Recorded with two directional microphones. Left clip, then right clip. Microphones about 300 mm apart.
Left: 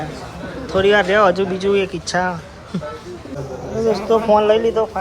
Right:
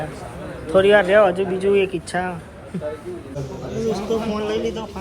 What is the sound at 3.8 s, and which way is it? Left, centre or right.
Speech, centre.